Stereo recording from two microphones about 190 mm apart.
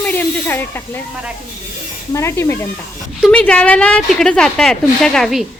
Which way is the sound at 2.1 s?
15° left (ahead or behind).